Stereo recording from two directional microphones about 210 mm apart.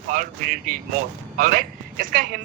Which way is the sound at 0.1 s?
40° right (ahead or behind).